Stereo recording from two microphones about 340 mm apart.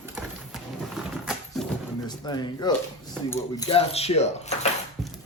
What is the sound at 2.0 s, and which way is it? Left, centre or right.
Speech, centre.